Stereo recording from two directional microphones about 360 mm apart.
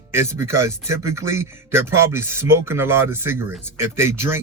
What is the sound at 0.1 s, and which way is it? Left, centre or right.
A man's voice, centre.